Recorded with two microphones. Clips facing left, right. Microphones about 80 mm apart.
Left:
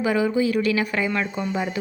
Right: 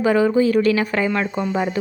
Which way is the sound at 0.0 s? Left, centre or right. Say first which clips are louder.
Right 5 dB; right.